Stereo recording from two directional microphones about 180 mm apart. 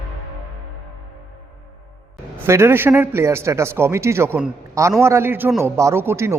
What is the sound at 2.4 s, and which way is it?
A man's voice, 15° right (ahead or behind).